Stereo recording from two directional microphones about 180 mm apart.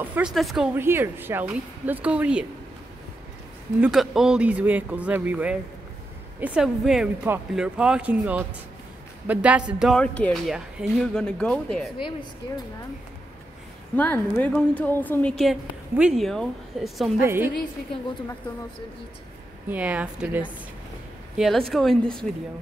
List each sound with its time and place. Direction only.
0.0 s speech: 5° right (ahead or behind)
0.7 s speech: 15° right (ahead or behind)
3.8 s speech: centre (ahead or behind)
13.9 s a woman's voice: 10° left (ahead or behind)
17.2 s speech: 15° right (ahead or behind)
19.7 s speech: 10° right (ahead or behind)